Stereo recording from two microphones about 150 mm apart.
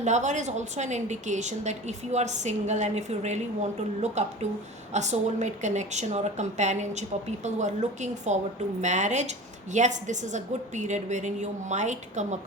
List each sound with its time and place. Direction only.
0.0 s speech: 50° right (ahead or behind)